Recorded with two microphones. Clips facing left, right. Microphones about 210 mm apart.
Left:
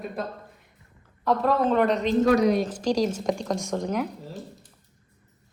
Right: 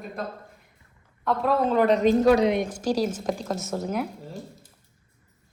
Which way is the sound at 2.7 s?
5° right (ahead or behind).